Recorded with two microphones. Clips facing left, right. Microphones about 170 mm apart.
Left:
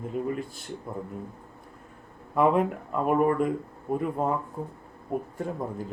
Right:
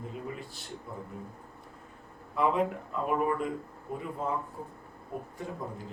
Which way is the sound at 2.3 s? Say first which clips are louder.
Left 5 dB; 55° left (ahead or behind).